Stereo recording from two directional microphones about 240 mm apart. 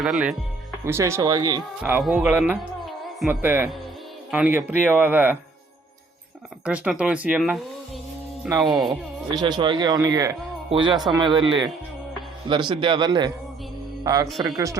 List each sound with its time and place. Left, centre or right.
0.0 s speech: centre
6.7 s speech: centre
8.6 s speech: centre
9.3 s speech: centre
12.5 s a man's voice: centre